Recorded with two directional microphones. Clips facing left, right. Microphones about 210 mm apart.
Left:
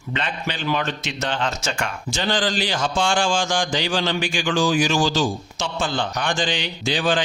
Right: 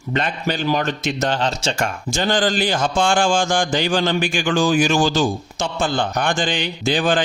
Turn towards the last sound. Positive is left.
turn(degrees=-50)  # may be behind; listen again after turning